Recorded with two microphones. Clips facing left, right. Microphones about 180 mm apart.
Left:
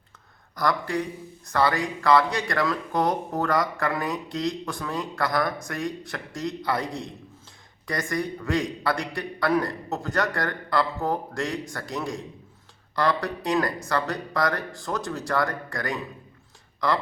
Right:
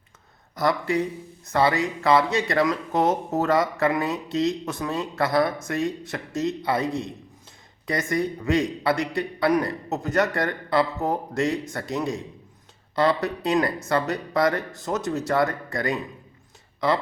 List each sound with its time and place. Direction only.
0.5 s speech: 20° right (ahead or behind)
8.1 s speech: 20° right (ahead or behind)